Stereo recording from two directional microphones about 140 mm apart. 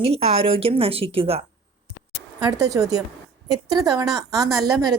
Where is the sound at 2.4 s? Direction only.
25° right (ahead or behind).